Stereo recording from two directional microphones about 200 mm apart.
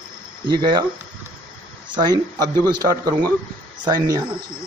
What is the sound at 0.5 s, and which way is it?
Speech, 25° right (ahead or behind).